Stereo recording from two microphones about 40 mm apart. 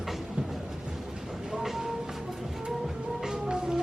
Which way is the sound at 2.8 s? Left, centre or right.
Centre.